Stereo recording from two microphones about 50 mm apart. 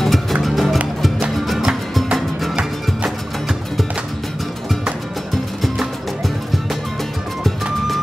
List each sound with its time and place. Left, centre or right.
0.0 s music: centre